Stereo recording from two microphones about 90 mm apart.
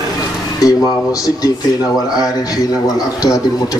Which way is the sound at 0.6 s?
40° left (ahead or behind).